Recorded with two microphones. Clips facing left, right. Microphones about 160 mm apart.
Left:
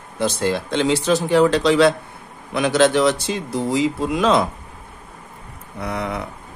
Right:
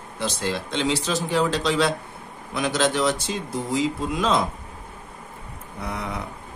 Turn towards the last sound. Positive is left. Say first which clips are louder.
# left 5 dB
turn(degrees=75)  # may be behind; listen again after turning